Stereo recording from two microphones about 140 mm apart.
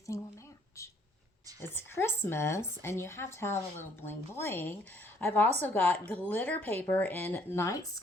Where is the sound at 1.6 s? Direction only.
15° left (ahead or behind).